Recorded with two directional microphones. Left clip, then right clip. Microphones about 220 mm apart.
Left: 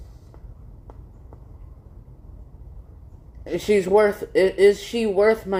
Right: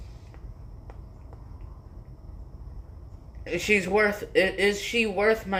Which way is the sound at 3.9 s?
15° left (ahead or behind).